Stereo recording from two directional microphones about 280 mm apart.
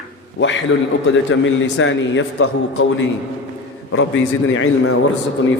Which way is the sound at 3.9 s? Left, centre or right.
Left.